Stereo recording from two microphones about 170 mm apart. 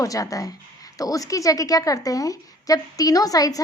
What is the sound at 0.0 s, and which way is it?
A woman's voice, 20° left (ahead or behind).